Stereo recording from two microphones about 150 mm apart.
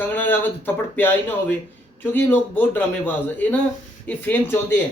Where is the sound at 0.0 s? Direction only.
15° left (ahead or behind).